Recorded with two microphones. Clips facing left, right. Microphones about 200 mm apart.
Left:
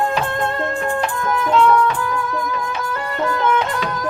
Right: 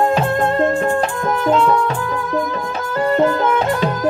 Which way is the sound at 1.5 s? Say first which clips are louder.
Even; 40° right (ahead or behind).